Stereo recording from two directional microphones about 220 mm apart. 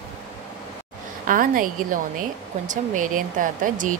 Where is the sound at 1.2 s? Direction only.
40° right (ahead or behind).